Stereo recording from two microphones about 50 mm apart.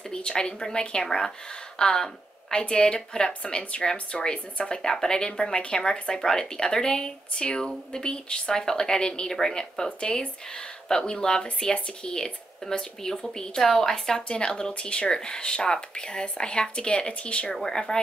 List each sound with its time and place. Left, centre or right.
0.1 s speech: centre